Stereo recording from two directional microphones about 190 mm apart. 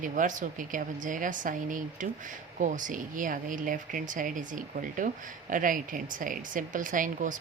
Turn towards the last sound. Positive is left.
turn(degrees=-45)  # may be behind; listen again after turning